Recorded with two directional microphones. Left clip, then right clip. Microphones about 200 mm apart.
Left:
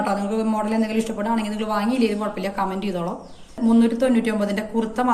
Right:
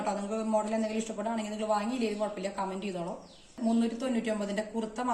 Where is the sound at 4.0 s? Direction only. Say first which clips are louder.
Left 12 dB; 50° right (ahead or behind).